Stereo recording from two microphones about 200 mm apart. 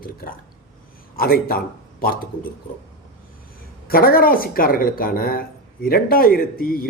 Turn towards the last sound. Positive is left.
turn(degrees=45)  # may be behind; listen again after turning